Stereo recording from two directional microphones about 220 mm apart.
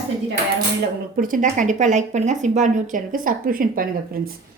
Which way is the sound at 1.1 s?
40° right (ahead or behind).